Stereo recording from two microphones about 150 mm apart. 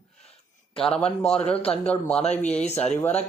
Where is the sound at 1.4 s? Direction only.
40° left (ahead or behind).